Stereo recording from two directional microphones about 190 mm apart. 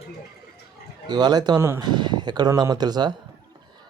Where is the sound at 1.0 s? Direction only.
20° right (ahead or behind).